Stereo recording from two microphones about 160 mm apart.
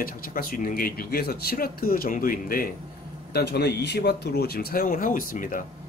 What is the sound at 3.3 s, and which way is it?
Speech, 90° left.